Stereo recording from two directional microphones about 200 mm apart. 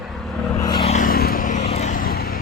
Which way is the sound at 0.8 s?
40° left (ahead or behind).